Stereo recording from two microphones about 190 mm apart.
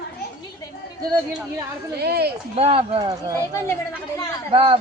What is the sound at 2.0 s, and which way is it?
Speech, 60° right (ahead or behind).